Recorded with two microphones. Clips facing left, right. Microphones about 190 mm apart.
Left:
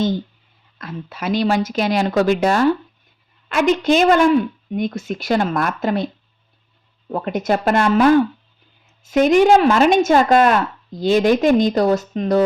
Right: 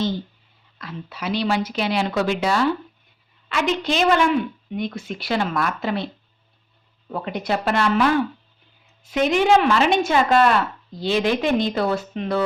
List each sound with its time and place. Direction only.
0.8 s a woman's voice: 50° left (ahead or behind)
7.1 s a woman's voice: 45° left (ahead or behind)